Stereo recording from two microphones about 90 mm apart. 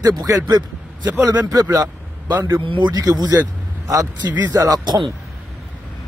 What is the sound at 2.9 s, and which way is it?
Speech, 45° right (ahead or behind).